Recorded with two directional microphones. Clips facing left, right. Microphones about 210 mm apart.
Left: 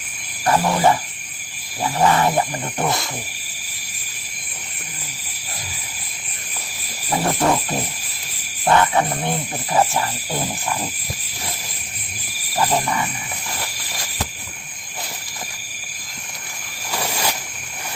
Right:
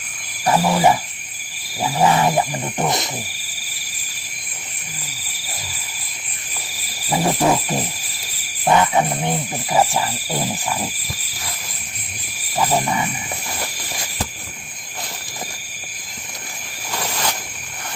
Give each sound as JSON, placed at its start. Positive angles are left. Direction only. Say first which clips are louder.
{"t": 0.4, "sound": "speech", "louder": "right 1 dB", "side_deg": -5}
{"t": 7.1, "sound": "speech", "louder": "right 1 dB", "side_deg": -10}
{"t": 12.8, "sound": "speech", "louder": "right 1 dB", "side_deg": -15}
{"t": 16.9, "sound": "a sound", "louder": "left 1 dB", "side_deg": 10}